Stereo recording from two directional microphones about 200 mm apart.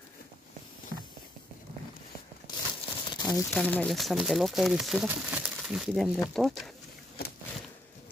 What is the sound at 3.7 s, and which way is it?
Speech, 5° left (ahead or behind).